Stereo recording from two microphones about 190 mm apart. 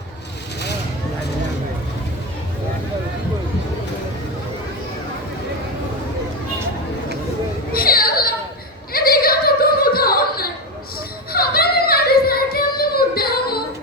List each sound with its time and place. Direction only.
7.7 s children playing: 50° left (ahead or behind)
8.9 s opera: 50° left (ahead or behind)
11.3 s a sound: 55° left (ahead or behind)